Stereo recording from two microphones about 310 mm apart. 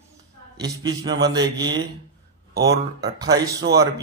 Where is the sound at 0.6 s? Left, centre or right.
Centre.